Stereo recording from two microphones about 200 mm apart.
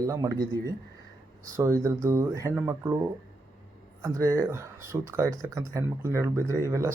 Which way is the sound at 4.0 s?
15° right (ahead or behind).